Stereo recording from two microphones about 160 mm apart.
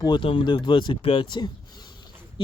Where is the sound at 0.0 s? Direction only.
30° left (ahead or behind).